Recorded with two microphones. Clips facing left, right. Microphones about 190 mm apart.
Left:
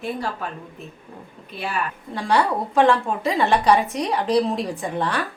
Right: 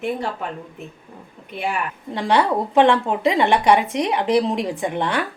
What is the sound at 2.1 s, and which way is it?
A woman's voice, 25° right (ahead or behind).